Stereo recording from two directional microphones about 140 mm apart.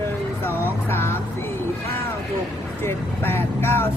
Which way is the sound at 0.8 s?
15° left (ahead or behind).